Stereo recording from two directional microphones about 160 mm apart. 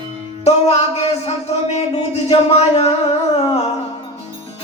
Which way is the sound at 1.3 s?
40° left (ahead or behind).